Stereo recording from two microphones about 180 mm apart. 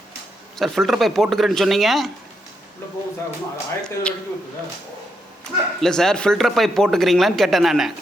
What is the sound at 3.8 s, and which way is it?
Speech, 5° left (ahead or behind).